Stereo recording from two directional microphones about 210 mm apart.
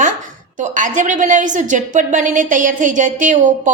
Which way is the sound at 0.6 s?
40° right (ahead or behind).